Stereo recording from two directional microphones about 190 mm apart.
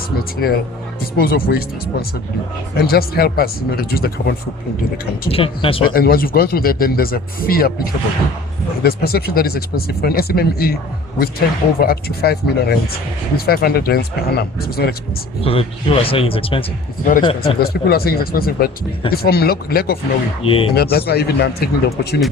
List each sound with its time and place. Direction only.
0.3 s speech: 55° left (ahead or behind)
5.3 s a man's voice: 30° left (ahead or behind)
5.8 s speech: 50° left (ahead or behind)
8.8 s speech: 55° left (ahead or behind)
15.4 s a man's voice: 30° left (ahead or behind)
17.6 s speech: 55° left (ahead or behind)
20.4 s a man's voice: 30° left (ahead or behind)
20.7 s speech: 55° left (ahead or behind)